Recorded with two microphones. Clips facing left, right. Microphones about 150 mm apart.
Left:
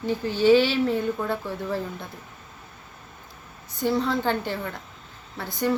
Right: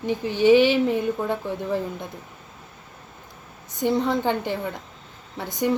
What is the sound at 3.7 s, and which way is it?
A woman's voice, 20° right (ahead or behind).